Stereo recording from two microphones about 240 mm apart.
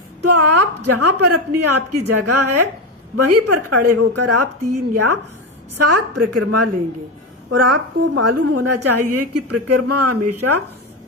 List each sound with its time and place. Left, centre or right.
0.2 s a sound: right
1.2 s a woman's voice: right
5.7 s a woman's voice: right